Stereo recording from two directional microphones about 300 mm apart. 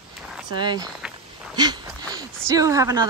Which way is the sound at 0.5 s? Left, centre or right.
Centre.